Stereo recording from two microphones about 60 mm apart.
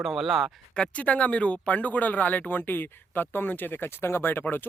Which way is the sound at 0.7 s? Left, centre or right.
Centre.